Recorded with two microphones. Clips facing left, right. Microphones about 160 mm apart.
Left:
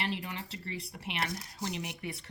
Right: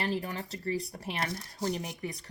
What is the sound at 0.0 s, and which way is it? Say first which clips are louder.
Speech: right 4 dB; 40° right (ahead or behind).